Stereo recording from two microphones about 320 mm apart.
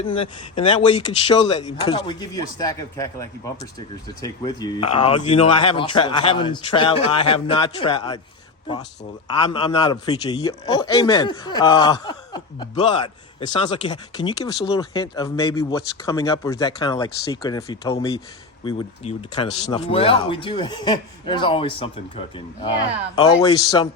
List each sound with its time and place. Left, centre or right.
0.0 s a man's voice: centre
9.4 s a man's voice: centre
13.8 s a man's voice: centre